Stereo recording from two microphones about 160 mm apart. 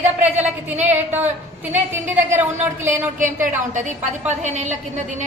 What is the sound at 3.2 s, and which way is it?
A woman's voice, 50° right (ahead or behind).